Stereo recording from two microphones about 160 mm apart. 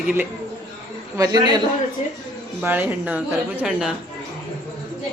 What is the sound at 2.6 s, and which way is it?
Speech, 10° right (ahead or behind).